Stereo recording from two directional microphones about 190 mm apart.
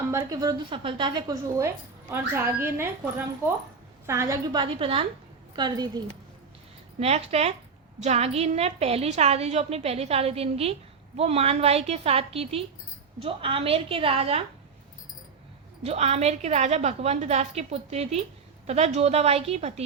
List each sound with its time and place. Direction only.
0.1 s a woman's voice: 20° right (ahead or behind)
7.0 s a woman's voice: 35° right (ahead or behind)
15.8 s a woman's voice: 35° right (ahead or behind)